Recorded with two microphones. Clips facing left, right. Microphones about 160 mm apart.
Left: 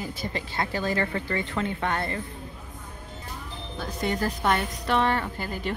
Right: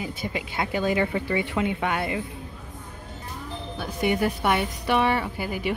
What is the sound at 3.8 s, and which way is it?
A woman's voice, 10° right (ahead or behind).